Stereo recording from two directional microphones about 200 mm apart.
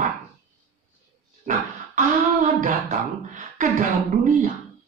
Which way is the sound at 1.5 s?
40° right (ahead or behind).